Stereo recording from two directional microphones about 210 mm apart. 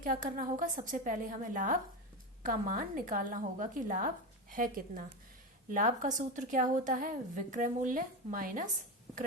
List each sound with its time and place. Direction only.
0.0 s a woman's voice: 40° right (ahead or behind)